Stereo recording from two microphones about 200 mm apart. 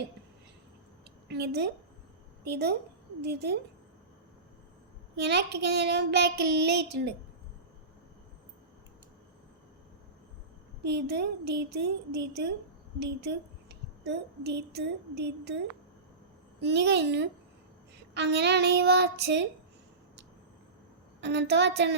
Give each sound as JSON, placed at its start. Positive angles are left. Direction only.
{"t": 1.3, "sound": "a woman's voice", "side_deg": -55}
{"t": 3.2, "sound": "child singing", "side_deg": -55}
{"t": 5.1, "sound": "child singing", "side_deg": -55}
{"t": 10.8, "sound": "child singing", "side_deg": -55}
{"t": 13.0, "sound": "a woman's voice", "side_deg": -55}
{"t": 16.6, "sound": "child singing", "side_deg": -60}
{"t": 21.2, "sound": "child singing", "side_deg": -60}